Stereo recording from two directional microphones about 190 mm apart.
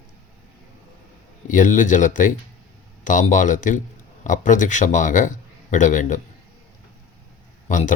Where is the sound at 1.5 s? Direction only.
45° left (ahead or behind).